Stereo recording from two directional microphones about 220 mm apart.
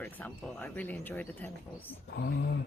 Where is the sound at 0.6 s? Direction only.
5° left (ahead or behind).